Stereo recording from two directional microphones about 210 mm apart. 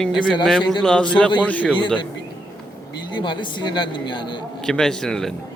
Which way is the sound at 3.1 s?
20° left (ahead or behind).